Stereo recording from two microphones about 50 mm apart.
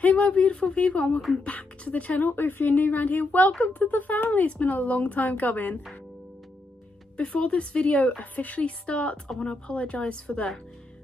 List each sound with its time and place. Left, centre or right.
0.0 s speech: left
2.3 s speech: left
7.2 s speech: left